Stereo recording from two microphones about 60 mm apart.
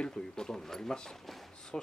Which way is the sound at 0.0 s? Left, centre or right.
Centre.